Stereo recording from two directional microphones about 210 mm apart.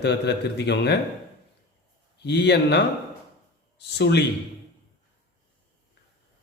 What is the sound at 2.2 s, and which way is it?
A man's voice, 55° left (ahead or behind).